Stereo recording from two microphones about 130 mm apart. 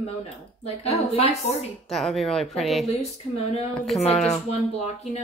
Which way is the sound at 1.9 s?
Centre (ahead or behind).